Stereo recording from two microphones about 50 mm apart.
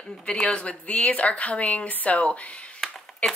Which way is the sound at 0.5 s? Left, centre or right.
Left.